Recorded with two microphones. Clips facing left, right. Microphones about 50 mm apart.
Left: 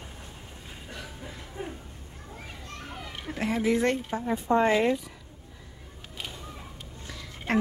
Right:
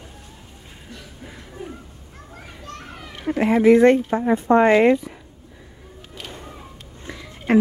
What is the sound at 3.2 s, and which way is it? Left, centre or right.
Speech, right.